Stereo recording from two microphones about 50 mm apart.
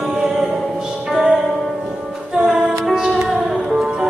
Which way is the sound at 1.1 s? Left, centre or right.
Centre.